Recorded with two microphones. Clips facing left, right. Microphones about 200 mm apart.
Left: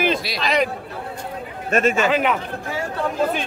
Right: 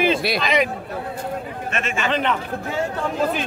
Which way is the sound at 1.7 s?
40° left (ahead or behind).